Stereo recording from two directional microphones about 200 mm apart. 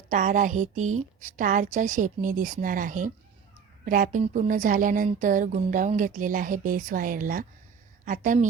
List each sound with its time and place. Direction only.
0.1 s a woman's voice: 40° right (ahead or behind)